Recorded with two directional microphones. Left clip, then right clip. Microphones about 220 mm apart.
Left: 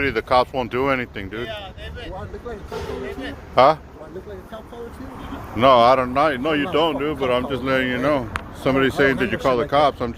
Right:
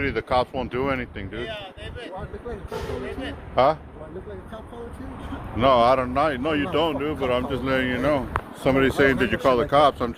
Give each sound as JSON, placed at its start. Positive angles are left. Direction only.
{"t": 0.0, "sound": "speech", "side_deg": 30}
{"t": 3.1, "sound": "speech", "side_deg": -5}
{"t": 3.5, "sound": "speech", "side_deg": 35}
{"t": 5.5, "sound": "speech", "side_deg": 25}
{"t": 8.6, "sound": "speech", "side_deg": 0}